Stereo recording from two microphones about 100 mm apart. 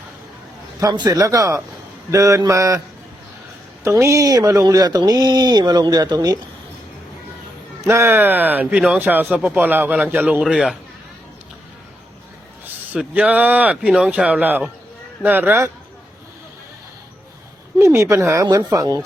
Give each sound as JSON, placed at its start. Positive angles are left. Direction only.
{"t": 0.8, "sound": "speech", "side_deg": -40}
{"t": 3.8, "sound": "speech", "side_deg": -30}
{"t": 7.8, "sound": "speech", "side_deg": -30}
{"t": 10.4, "sound": "a man's voice", "side_deg": -5}
{"t": 12.6, "sound": "speech", "side_deg": -15}
{"t": 17.7, "sound": "speech", "side_deg": -30}